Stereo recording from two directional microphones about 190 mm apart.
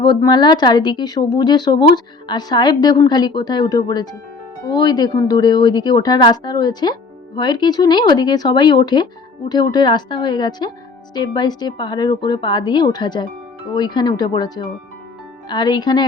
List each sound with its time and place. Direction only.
0.0 s speech: 25° left (ahead or behind)